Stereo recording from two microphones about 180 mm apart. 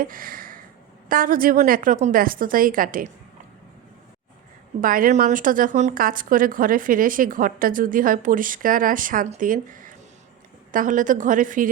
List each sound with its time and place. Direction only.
0.0 s a sound: 50° right (ahead or behind)
1.0 s speech: 50° right (ahead or behind)
4.8 s speech: 50° right (ahead or behind)